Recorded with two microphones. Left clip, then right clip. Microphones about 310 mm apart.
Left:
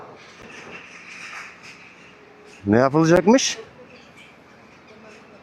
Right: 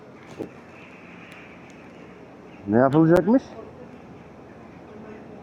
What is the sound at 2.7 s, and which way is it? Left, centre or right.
Speech, left.